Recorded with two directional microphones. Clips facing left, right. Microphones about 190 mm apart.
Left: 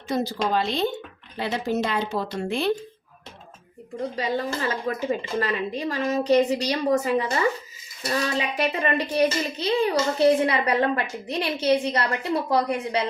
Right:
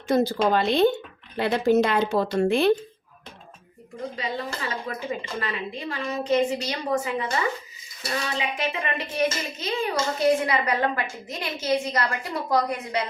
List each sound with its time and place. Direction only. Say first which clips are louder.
0.1 s a woman's voice: right 4 dB; 50° right (ahead or behind)
4.1 s speech: left 5 dB; 40° left (ahead or behind)
8.4 s speech: left 3 dB; 40° left (ahead or behind)